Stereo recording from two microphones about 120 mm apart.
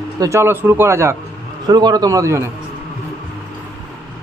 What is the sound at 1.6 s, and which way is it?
Speech, 35° right (ahead or behind).